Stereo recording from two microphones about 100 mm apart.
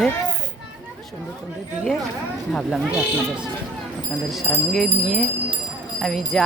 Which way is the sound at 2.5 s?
5° left (ahead or behind).